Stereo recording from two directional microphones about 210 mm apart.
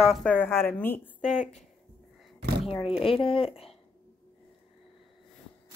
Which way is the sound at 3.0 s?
25° left (ahead or behind).